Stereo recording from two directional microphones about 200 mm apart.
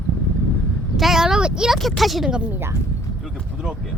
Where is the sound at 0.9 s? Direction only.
Centre (ahead or behind).